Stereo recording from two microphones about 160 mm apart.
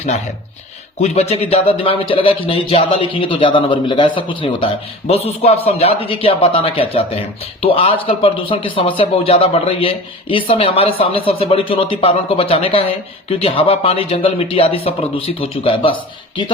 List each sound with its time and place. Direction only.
1.0 s speech: 40° left (ahead or behind)